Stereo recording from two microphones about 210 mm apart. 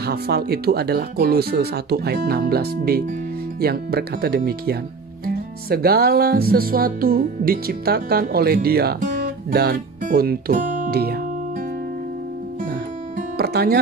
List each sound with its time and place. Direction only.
0.0 s music: 50° right (ahead or behind)
13.4 s music: 50° right (ahead or behind)